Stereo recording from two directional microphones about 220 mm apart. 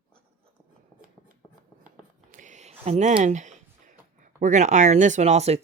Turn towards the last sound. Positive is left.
turn(degrees=-30)  # may be behind; listen again after turning